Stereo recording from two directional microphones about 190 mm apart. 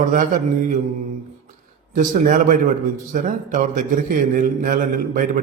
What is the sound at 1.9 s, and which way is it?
A man's voice, 45° right (ahead or behind).